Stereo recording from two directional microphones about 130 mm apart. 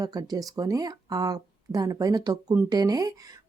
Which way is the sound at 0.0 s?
30° right (ahead or behind).